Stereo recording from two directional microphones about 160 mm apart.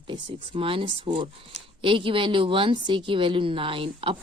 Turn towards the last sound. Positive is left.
turn(degrees=-35)  # may be behind; listen again after turning